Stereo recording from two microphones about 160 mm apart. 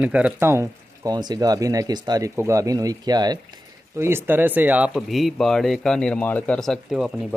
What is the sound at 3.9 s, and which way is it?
Speech, 15° right (ahead or behind).